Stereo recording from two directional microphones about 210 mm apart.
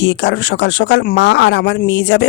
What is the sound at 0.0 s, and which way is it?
Speech, 55° left (ahead or behind).